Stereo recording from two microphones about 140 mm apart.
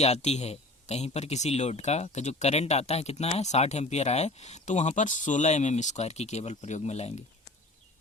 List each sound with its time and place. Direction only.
0.0 s speech: 50° left (ahead or behind)